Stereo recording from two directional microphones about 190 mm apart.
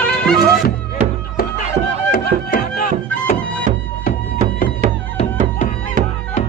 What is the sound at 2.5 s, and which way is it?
Music, 45° left (ahead or behind).